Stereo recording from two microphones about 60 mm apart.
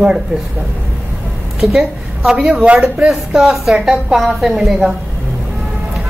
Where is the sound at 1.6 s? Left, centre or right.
Centre.